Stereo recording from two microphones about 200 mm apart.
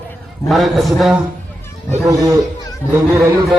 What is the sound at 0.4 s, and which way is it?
Speech, centre (ahead or behind).